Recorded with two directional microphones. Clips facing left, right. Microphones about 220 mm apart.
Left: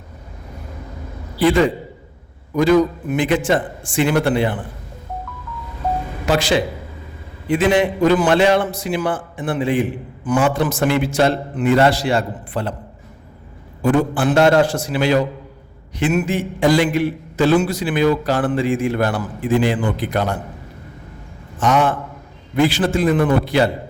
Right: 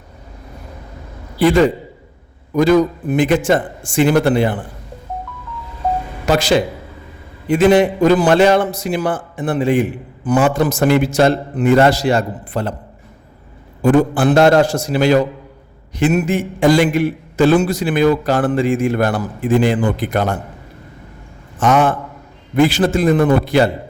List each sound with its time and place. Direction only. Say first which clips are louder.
2.6 s a man's voice: right 2 dB; 40° right (ahead or behind)
6.2 s a man's voice: right 3 dB; 40° right (ahead or behind)
13.8 s a man's voice: right 4 dB; 40° right (ahead or behind)
21.6 s a man's voice: right 3 dB; 50° right (ahead or behind)